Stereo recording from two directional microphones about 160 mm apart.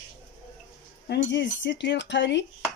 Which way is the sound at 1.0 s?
90° left.